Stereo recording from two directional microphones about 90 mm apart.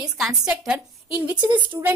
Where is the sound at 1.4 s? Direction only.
60° right (ahead or behind).